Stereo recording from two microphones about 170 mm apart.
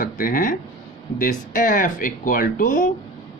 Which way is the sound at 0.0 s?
55° left (ahead or behind).